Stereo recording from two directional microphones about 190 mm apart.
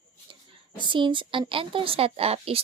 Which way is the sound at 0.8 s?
25° right (ahead or behind).